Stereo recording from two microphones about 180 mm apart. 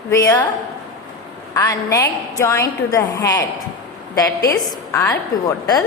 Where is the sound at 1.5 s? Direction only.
15° left (ahead or behind).